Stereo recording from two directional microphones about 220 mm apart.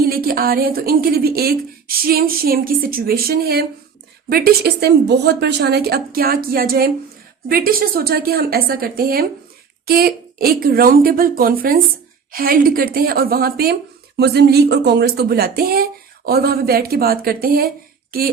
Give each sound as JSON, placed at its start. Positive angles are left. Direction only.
{"t": 0.0, "sound": "a woman's voice", "side_deg": -40}